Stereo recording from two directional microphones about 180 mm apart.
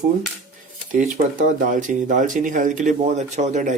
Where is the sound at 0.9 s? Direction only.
45° right (ahead or behind).